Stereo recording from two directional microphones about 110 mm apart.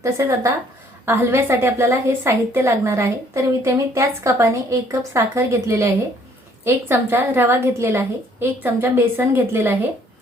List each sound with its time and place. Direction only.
0.0 s a woman's voice: 30° right (ahead or behind)